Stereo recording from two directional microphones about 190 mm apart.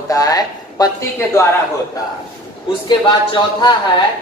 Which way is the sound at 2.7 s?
25° left (ahead or behind).